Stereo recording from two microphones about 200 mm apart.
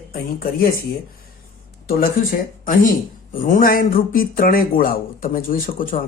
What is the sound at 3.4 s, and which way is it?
Speech, 45° left (ahead or behind).